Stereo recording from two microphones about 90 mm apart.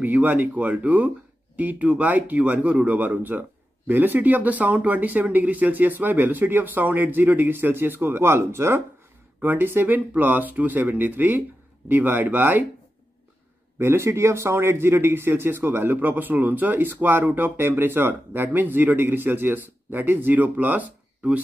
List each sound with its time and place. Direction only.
0.0 s speech: 20° right (ahead or behind)
13.7 s speech: 30° right (ahead or behind)